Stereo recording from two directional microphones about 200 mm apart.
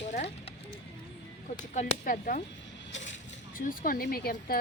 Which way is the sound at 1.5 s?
40° left (ahead or behind).